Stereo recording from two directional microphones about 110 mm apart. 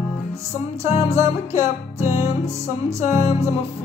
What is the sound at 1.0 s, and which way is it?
Music, 25° right (ahead or behind).